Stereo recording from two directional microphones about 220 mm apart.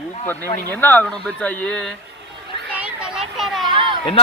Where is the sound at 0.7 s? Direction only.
10° left (ahead or behind).